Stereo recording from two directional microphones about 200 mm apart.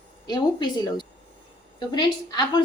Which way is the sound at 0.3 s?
20° left (ahead or behind).